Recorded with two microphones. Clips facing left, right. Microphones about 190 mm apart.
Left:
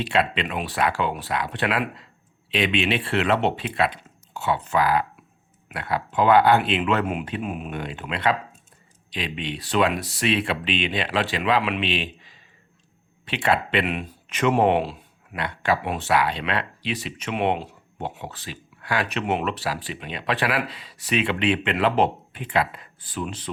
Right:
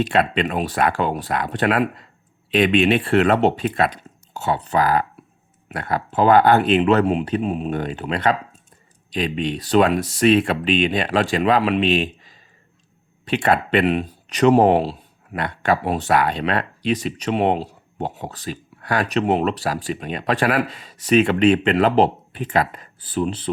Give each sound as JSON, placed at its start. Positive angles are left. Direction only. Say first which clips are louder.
{"t": 0.0, "sound": "speech", "louder": "right 4 dB", "side_deg": -45}